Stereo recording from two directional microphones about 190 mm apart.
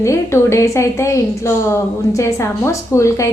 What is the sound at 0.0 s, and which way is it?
A woman's voice, 15° left (ahead or behind).